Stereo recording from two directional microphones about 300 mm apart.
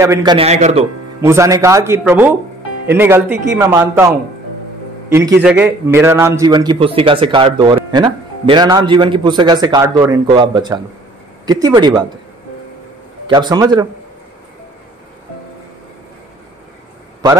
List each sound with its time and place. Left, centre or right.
0.0 s a man's voice: centre
1.2 s a man's voice: centre
5.1 s a man's voice: centre
13.3 s a man's voice: centre